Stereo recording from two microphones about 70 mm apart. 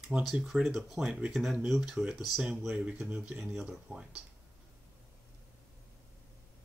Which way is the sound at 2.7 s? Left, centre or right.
Centre.